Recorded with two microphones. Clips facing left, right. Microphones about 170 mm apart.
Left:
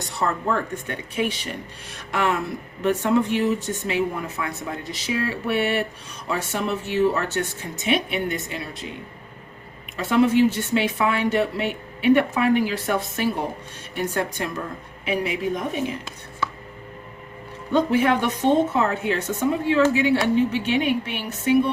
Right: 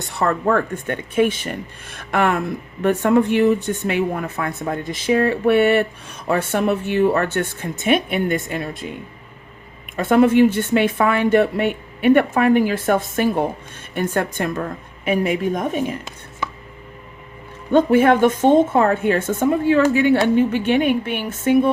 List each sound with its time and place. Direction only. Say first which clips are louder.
0.1 s speech: right 6 dB; 55° right (ahead or behind)
10.0 s speech: right 4 dB; 50° right (ahead or behind)
16.4 s chopping: even; 20° right (ahead or behind)
17.7 s speech: right 6 dB; 50° right (ahead or behind)